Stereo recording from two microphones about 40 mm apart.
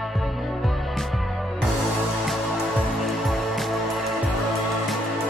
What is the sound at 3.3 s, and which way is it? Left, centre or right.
Music, centre.